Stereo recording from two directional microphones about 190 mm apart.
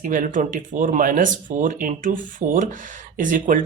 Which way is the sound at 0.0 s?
45° right (ahead or behind).